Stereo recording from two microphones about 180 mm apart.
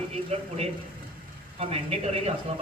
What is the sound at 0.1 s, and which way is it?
A man's voice, 35° right (ahead or behind).